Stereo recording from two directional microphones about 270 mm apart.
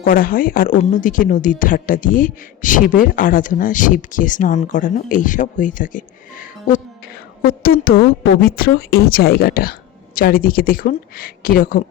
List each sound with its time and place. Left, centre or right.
0.0 s speech: left